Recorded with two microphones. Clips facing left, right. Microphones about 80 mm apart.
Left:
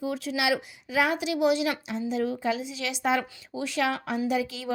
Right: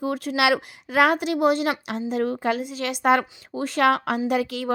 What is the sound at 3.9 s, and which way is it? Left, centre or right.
Speech, right.